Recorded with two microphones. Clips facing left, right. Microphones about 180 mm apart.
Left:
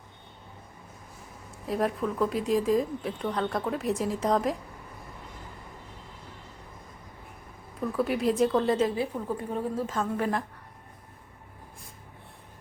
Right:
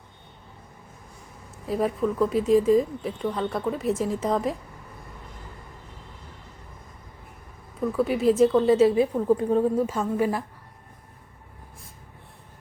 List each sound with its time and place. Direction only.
1.6 s speech: centre (ahead or behind)
7.8 s speech: centre (ahead or behind)
9.4 s a woman's voice: 20° right (ahead or behind)
9.8 s a woman's voice: 10° right (ahead or behind)